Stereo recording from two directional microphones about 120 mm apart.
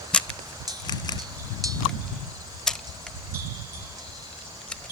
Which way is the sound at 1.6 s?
30° right (ahead or behind).